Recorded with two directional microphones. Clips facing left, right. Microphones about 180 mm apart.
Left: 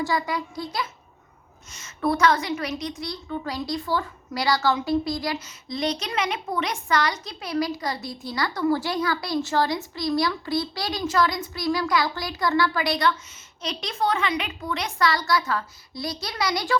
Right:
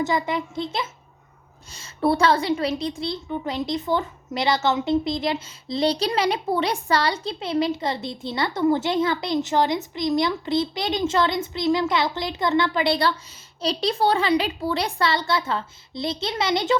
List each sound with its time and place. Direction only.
0.0 s a child's voice: 20° right (ahead or behind)